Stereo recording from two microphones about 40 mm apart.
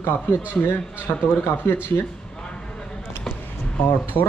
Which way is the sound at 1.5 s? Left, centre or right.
Left.